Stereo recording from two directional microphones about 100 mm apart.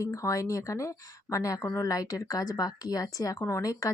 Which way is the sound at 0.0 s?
30° left (ahead or behind).